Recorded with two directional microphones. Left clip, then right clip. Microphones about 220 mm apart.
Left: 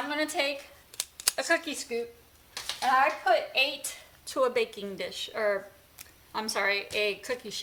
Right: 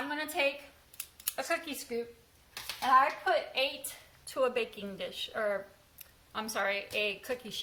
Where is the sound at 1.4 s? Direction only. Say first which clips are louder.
Left 6 dB; 40° left (ahead or behind).